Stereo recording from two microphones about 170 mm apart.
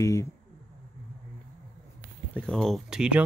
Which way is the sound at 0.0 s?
20° left (ahead or behind).